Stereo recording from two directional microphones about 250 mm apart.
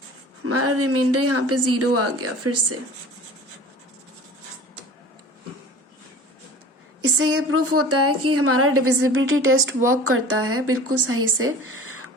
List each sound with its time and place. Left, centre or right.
0.4 s a woman's voice: right
7.0 s a woman's voice: right